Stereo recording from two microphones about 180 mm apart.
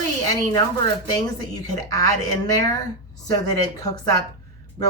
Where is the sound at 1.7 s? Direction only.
20° left (ahead or behind).